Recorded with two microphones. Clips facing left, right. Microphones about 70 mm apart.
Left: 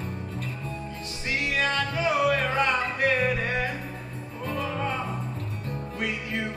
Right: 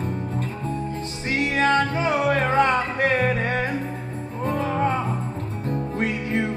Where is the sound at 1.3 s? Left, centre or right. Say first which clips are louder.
Right 6 dB; right.